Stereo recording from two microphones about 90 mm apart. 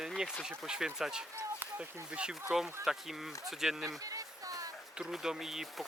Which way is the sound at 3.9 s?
40° right (ahead or behind).